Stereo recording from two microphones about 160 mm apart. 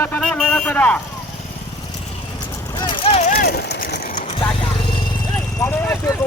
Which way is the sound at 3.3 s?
75° left (ahead or behind).